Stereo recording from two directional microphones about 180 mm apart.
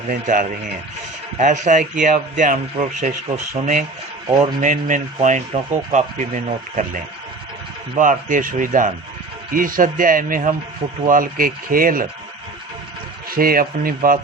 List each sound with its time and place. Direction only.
0.1 s a man's voice: 50° right (ahead or behind)
13.3 s speech: 55° right (ahead or behind)